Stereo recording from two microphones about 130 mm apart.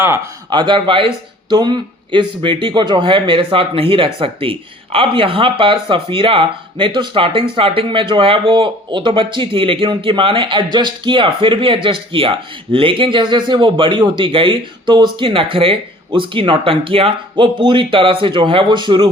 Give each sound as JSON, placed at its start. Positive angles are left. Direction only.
{"t": 0.5, "sound": "speech", "side_deg": -35}